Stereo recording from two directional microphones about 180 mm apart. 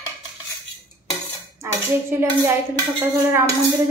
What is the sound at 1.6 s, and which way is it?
Dishes, 15° right (ahead or behind).